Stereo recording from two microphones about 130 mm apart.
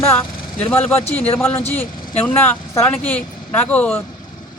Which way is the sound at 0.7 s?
15° left (ahead or behind).